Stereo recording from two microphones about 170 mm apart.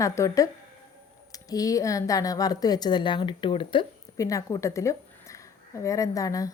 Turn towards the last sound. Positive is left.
turn(degrees=20)  # may be behind; listen again after turning